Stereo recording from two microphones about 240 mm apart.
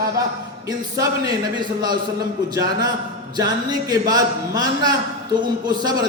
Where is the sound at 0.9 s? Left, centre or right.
Centre.